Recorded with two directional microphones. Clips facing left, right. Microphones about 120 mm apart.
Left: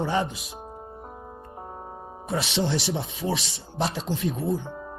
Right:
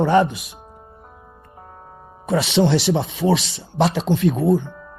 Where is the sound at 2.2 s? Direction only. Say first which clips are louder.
Right 9 dB; 80° right.